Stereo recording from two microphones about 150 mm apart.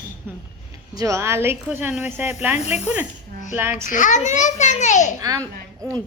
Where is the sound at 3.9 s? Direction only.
60° left (ahead or behind).